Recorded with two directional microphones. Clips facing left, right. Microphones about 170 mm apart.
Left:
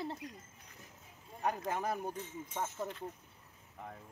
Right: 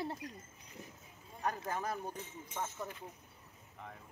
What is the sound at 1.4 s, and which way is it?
Speech, 15° left (ahead or behind).